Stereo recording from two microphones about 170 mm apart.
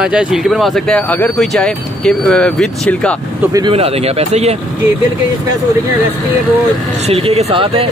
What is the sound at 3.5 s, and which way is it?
A man's voice, 30° right (ahead or behind).